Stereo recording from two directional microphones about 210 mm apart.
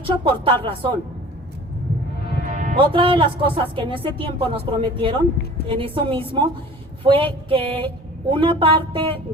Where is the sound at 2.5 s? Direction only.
40° right (ahead or behind).